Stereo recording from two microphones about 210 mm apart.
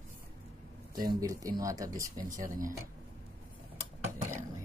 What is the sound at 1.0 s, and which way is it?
Speech, 15° right (ahead or behind).